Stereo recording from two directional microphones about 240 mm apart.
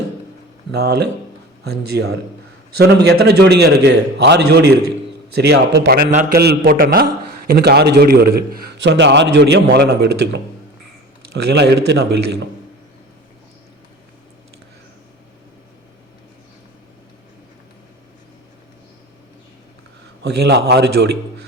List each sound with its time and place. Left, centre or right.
0.7 s a man's voice: right
2.7 s a man's voice: right
6.1 s a man's voice: right
11.4 s a man's voice: right
20.2 s a man's voice: right